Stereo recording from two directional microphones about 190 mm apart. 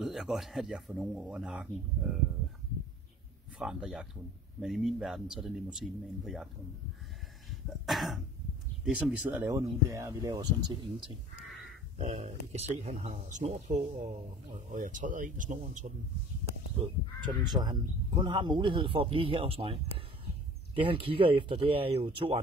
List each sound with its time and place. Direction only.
0.0 s speech: centre (ahead or behind)
3.5 s speech: 5° right (ahead or behind)
7.8 s speech: centre (ahead or behind); by 10.8 s 20° right (ahead or behind)
12.0 s speech: 35° right (ahead or behind)
17.4 s speech: 20° right (ahead or behind)